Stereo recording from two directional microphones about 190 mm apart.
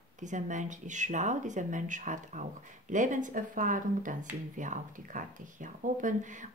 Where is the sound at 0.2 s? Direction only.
40° right (ahead or behind).